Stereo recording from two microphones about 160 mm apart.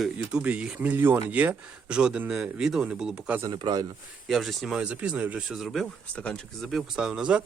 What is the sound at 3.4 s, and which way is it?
Speech, 25° right (ahead or behind).